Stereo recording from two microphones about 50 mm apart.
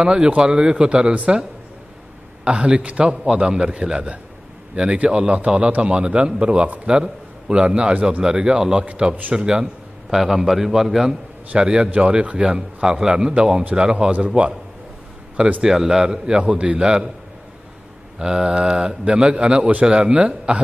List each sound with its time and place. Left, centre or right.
0.0 s a man's voice: centre
2.4 s a man's voice: right
11.5 s a man's voice: centre
18.2 s a man's voice: centre